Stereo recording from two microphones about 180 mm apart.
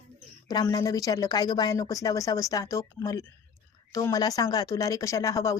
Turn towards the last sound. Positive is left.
turn(degrees=15)  # may be behind; listen again after turning